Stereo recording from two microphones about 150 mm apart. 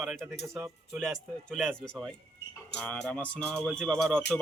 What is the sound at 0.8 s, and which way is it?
Speech, centre (ahead or behind).